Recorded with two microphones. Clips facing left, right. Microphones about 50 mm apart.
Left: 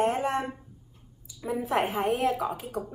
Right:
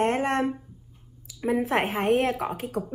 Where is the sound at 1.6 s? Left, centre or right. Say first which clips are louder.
Left 2 dB; right.